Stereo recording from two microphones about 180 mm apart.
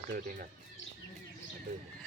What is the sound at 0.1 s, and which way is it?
Speech, 50° right (ahead or behind).